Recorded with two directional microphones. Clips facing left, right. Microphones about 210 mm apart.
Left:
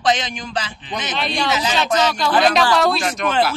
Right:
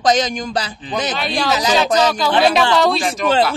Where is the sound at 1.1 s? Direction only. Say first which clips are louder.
Right 2 dB; centre (ahead or behind).